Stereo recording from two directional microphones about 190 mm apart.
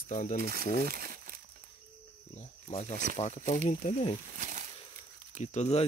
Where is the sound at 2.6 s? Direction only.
35° left (ahead or behind).